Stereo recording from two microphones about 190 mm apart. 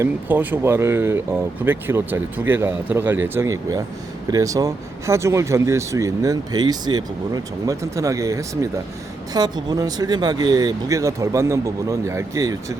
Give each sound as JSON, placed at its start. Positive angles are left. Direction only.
{"t": 0.0, "sound": "speech", "side_deg": -10}